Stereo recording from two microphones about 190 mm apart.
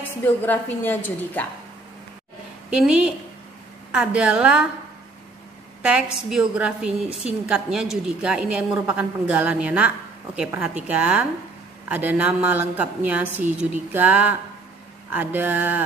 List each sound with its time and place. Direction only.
0.0 s a woman's voice: 10° left (ahead or behind)
2.7 s a woman's voice: 5° right (ahead or behind)
5.8 s a sound: 5° right (ahead or behind)
6.1 s a woman's voice: 5° right (ahead or behind)